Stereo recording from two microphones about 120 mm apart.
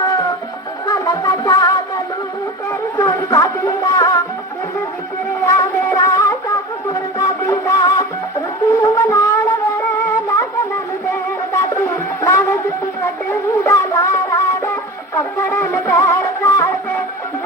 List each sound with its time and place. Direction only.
0.9 s music: 30° left (ahead or behind)
3.0 s music: 25° left (ahead or behind)
5.4 s music: 25° left (ahead or behind)
8.7 s wind instrument: 25° left (ahead or behind)
11.1 s music: 25° left (ahead or behind)